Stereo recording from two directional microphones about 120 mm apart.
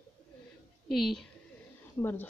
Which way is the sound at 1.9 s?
15° left (ahead or behind).